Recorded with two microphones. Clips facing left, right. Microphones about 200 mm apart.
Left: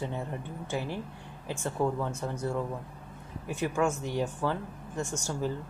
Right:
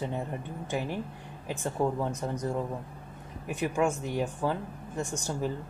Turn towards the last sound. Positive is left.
turn(degrees=-15)  # may be behind; listen again after turning